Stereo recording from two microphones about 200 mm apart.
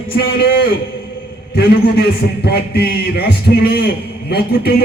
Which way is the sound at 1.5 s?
50° left (ahead or behind).